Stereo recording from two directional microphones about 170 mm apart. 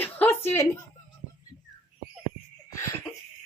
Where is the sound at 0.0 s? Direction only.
10° left (ahead or behind).